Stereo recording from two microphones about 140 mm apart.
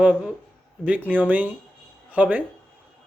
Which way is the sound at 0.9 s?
10° right (ahead or behind).